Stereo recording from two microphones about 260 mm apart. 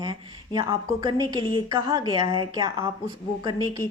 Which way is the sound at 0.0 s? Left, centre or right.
Centre.